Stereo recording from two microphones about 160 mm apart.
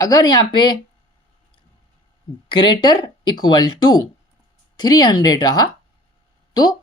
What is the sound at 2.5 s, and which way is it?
Speech, 30° left (ahead or behind).